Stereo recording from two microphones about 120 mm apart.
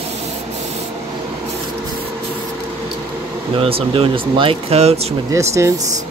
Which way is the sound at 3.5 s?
50° right (ahead or behind).